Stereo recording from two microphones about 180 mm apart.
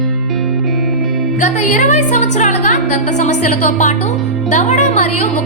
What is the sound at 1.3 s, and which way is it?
A woman's voice, 40° left (ahead or behind).